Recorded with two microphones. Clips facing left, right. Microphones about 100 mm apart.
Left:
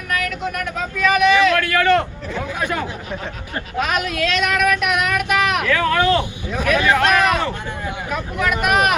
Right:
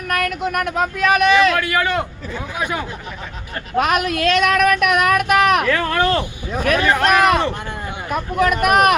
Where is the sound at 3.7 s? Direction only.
50° right (ahead or behind).